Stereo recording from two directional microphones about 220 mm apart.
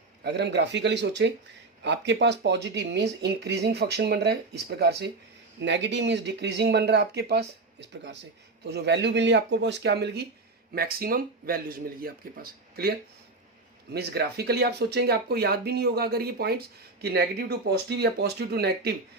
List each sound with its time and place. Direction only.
0.2 s speech: 50° right (ahead or behind)
13.9 s speech: 45° right (ahead or behind)